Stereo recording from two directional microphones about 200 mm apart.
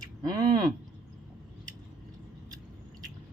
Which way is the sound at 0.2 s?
20° right (ahead or behind).